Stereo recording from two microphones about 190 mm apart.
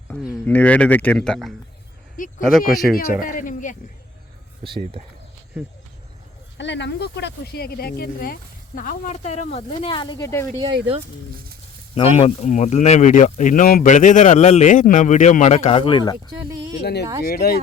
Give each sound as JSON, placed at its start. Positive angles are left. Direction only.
{"t": 0.4, "sound": "speech", "side_deg": 5}
{"t": 2.9, "sound": "speech", "side_deg": 50}
{"t": 4.6, "sound": "speech", "side_deg": -25}
{"t": 6.6, "sound": "speech", "side_deg": 70}
{"t": 10.6, "sound": "speech", "side_deg": -25}
{"t": 11.9, "sound": "speech", "side_deg": 30}
{"t": 16.5, "sound": "a sound", "side_deg": -20}
{"t": 16.8, "sound": "speech", "side_deg": 60}